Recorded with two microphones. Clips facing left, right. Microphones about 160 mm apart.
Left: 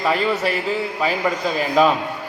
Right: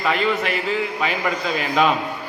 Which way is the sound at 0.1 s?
35° left (ahead or behind).